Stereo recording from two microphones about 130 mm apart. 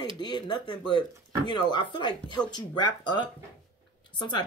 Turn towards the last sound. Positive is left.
turn(degrees=35)  # may be behind; listen again after turning